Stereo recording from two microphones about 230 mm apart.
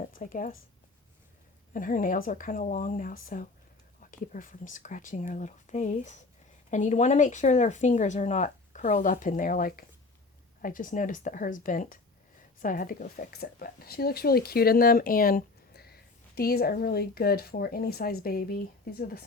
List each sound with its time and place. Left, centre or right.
0.1 s speech: left
1.7 s speech: left